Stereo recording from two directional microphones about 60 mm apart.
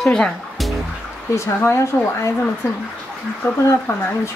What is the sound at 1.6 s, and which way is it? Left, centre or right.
Speech, left.